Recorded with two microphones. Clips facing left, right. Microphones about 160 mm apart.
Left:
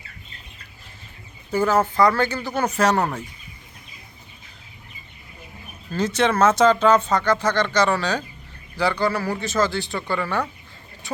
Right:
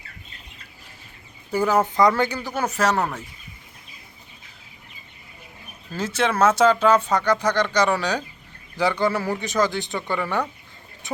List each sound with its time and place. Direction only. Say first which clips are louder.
1.5 s speech: left 1 dB; 15° right (ahead or behind)
5.9 s speech: left 3 dB; 5° right (ahead or behind)